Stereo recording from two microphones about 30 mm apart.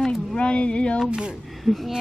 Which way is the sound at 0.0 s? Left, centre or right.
Centre.